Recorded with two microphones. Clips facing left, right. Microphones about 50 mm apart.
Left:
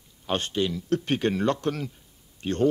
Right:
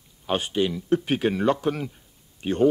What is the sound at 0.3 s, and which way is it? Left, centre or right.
Speech, centre.